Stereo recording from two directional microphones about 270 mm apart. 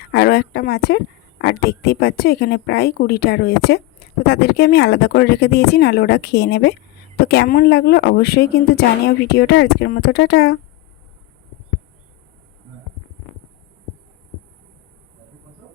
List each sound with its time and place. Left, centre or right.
0.1 s speech: left